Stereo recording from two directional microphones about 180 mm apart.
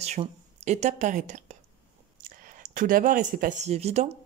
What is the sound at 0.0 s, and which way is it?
A woman's voice, 35° right (ahead or behind).